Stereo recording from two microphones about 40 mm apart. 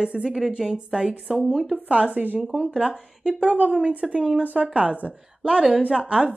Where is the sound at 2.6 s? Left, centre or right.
Right.